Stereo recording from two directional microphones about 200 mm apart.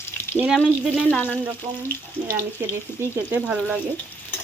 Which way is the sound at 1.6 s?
20° right (ahead or behind).